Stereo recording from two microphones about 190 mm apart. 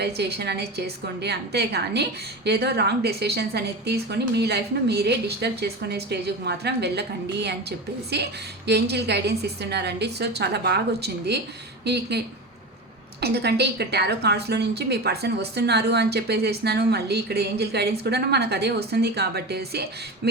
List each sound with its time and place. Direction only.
0.0 s a woman's voice: 60° right (ahead or behind)